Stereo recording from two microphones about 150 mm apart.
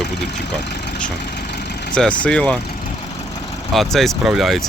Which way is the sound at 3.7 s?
Centre (ahead or behind).